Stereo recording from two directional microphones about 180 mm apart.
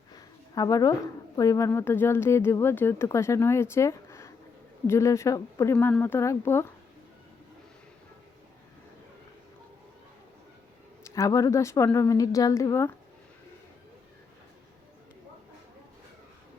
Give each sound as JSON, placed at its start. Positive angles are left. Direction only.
{"t": 0.1, "sound": "a woman's voice", "side_deg": 20}
{"t": 11.0, "sound": "a woman's voice", "side_deg": 20}